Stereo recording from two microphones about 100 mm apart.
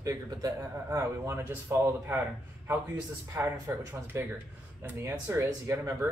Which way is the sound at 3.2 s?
25° right (ahead or behind).